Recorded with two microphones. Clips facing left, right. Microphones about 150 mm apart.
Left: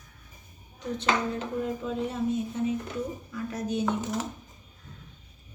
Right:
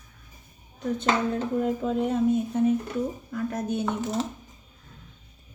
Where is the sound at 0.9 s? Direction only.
45° right (ahead or behind).